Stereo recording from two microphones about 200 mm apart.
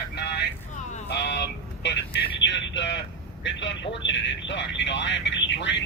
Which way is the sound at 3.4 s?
65° left (ahead or behind).